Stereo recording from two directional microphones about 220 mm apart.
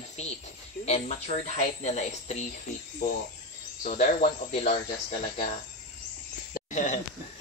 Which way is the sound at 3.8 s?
30° left (ahead or behind).